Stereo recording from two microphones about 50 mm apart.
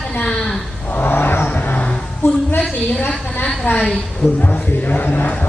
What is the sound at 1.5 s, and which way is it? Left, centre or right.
Vehicle, left.